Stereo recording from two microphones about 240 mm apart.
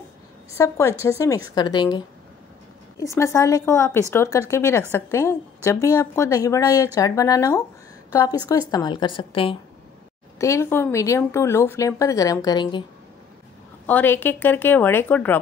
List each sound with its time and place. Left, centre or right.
0.6 s a woman's voice: centre
10.4 s a woman's voice: centre
13.8 s a woman's voice: centre